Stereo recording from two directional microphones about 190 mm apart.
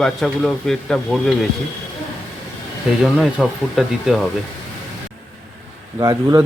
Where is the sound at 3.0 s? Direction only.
Centre (ahead or behind).